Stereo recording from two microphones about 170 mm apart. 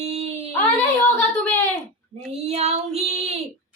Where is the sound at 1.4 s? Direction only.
5° left (ahead or behind).